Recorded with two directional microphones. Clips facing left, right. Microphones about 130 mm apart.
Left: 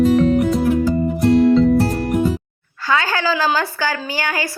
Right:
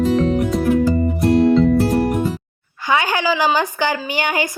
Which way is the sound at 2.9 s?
15° right (ahead or behind).